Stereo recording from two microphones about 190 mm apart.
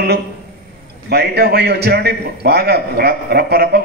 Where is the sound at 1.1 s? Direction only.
55° right (ahead or behind).